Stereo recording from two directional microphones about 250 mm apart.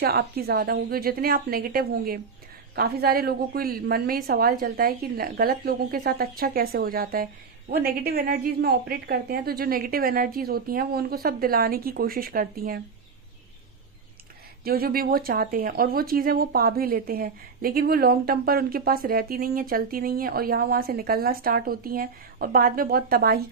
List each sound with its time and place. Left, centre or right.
0.0 s speech: right
14.6 s speech: right